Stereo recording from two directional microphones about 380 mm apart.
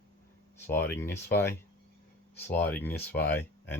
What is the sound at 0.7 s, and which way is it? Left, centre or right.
Speech, centre.